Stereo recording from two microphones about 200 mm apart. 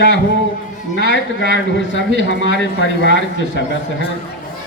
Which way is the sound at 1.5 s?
65° left (ahead or behind).